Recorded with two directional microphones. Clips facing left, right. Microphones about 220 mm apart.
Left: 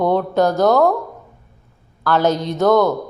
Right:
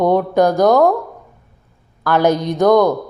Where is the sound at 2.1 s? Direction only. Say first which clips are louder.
Right 2 dB; 15° right (ahead or behind).